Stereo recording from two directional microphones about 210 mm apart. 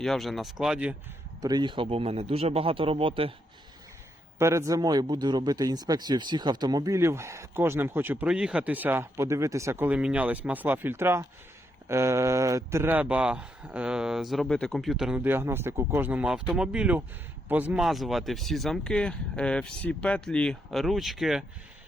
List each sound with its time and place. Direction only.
0.0 s speech: centre (ahead or behind)
1.4 s a man's voice: 20° right (ahead or behind)
4.4 s speech: 15° right (ahead or behind)